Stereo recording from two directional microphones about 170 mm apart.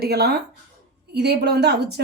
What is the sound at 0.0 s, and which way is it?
Speech, 70° right (ahead or behind).